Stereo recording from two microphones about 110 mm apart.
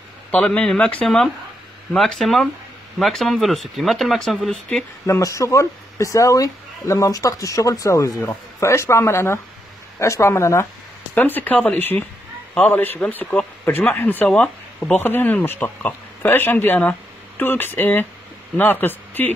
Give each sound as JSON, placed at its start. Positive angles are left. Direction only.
{"t": 0.3, "sound": "speech", "side_deg": 10}
{"t": 5.0, "sound": "speech", "side_deg": 30}